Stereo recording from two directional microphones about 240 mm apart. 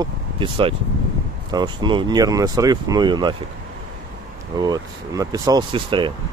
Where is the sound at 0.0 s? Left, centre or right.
Right.